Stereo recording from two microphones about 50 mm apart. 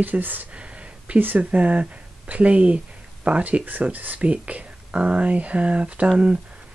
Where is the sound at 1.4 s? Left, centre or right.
Right.